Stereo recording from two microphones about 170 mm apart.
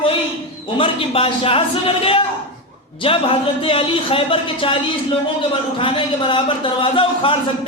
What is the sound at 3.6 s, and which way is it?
A man's voice, 30° left (ahead or behind).